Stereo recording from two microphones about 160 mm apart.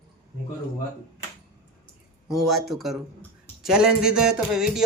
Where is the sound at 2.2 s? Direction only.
Centre (ahead or behind).